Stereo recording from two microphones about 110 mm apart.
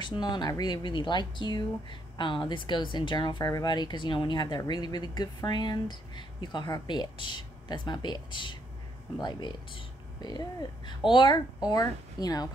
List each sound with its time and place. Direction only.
0.0 s speech: 45° left (ahead or behind)
11.7 s speech: 35° left (ahead or behind)